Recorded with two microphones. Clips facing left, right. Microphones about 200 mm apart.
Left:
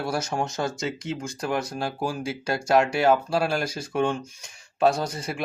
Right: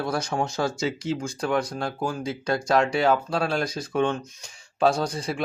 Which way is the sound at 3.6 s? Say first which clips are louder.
Right 1 dB; 25° left (ahead or behind).